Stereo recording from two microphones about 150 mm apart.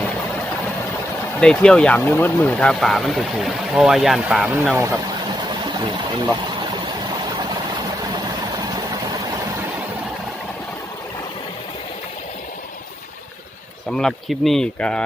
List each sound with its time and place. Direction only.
1.4 s speech: 5° left (ahead or behind); by 4.9 s 15° right (ahead or behind)
6.1 s a sound: 30° right (ahead or behind)
13.9 s speech: centre (ahead or behind)